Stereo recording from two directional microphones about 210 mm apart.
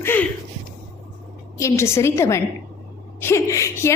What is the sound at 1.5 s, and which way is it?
A woman's voice, 15° left (ahead or behind).